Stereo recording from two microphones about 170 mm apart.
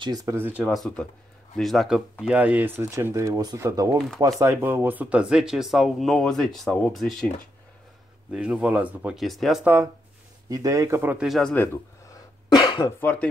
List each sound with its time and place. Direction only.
0.0 s speech: 20° right (ahead or behind)
0.7 s speech: 5° left (ahead or behind)
8.3 s speech: 5° right (ahead or behind)
10.5 s speech: 20° right (ahead or behind); by 12.9 s 25° left (ahead or behind)
13.0 s speech: 10° left (ahead or behind)